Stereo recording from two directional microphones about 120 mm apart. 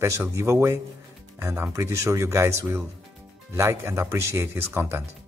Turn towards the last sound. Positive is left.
turn(degrees=-20)  # may be behind; listen again after turning